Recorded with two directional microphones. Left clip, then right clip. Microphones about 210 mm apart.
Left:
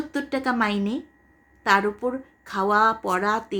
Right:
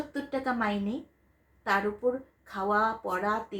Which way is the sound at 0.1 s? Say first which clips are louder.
Left 7 dB; 50° left (ahead or behind).